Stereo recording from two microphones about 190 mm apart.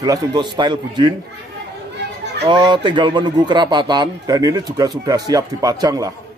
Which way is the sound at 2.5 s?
25° right (ahead or behind).